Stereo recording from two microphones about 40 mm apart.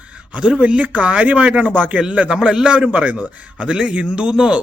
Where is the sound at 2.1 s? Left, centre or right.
Right.